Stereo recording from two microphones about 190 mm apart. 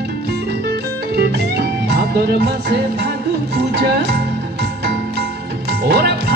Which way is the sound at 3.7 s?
60° right (ahead or behind).